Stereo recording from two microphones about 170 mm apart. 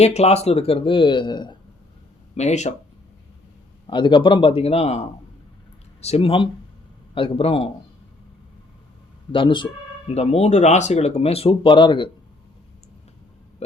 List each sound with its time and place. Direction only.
0.0 s speech: 40° left (ahead or behind)
2.3 s speech: 40° left (ahead or behind)
3.8 s speech: 30° left (ahead or behind)
9.3 s speech: 30° left (ahead or behind)
13.6 s a sound: 40° left (ahead or behind)